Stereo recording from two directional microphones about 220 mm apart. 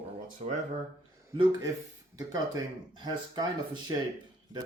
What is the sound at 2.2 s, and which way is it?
Speech, 15° right (ahead or behind).